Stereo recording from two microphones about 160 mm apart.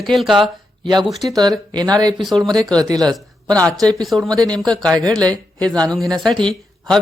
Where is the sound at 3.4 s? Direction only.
5° left (ahead or behind).